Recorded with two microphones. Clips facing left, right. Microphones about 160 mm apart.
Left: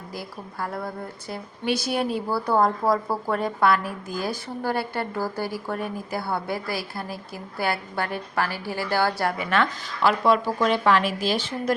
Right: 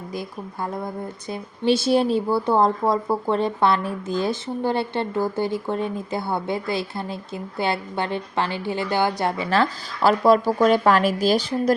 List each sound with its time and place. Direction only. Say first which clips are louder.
0.1 s a woman's voice: right 4 dB; 20° right (ahead or behind)
9.4 s speech: right 3 dB; 30° right (ahead or behind)